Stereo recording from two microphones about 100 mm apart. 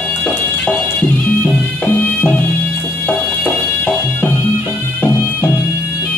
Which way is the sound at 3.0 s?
15° left (ahead or behind).